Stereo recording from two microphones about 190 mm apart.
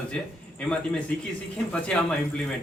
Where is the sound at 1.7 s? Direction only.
5° left (ahead or behind).